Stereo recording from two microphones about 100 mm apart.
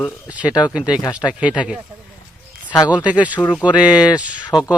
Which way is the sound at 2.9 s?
15° right (ahead or behind).